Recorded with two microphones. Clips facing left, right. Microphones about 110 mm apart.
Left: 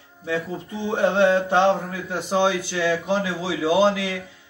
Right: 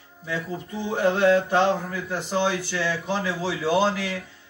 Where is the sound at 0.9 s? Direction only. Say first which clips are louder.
Left 1 dB; 25° left (ahead or behind).